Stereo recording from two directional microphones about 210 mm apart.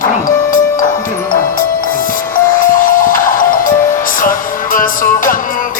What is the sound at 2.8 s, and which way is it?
Music, 40° left (ahead or behind).